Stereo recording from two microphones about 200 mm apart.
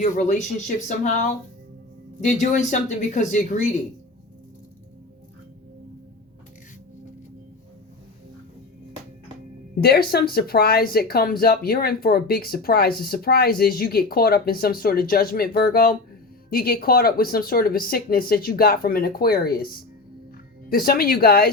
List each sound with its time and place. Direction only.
0.0 s speech: 35° left (ahead or behind)
9.8 s speech: 50° left (ahead or behind)
20.7 s speech: 50° left (ahead or behind)